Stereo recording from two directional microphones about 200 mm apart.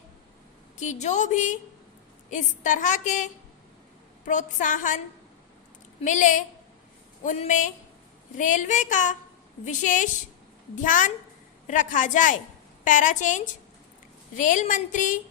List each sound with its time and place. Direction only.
0.8 s a woman's voice: 35° left (ahead or behind)
4.3 s a woman's voice: 40° left (ahead or behind)
6.0 s a woman's voice: 40° left (ahead or behind)